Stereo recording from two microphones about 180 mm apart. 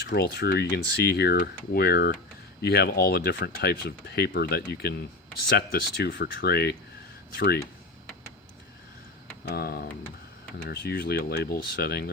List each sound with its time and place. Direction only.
0.0 s speech: 60° left (ahead or behind)
9.5 s speech: 60° left (ahead or behind)